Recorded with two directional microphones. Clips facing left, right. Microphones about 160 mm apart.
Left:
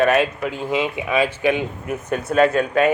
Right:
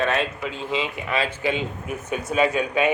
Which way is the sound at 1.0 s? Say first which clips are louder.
Left 5 dB; 15° left (ahead or behind).